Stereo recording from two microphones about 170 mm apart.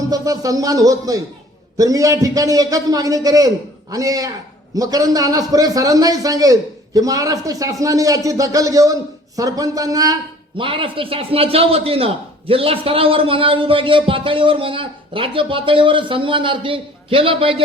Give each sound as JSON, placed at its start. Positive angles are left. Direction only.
{"t": 0.1, "sound": "a man's voice", "side_deg": -20}